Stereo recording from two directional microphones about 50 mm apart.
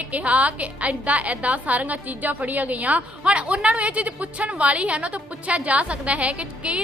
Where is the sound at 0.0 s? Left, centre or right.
Right.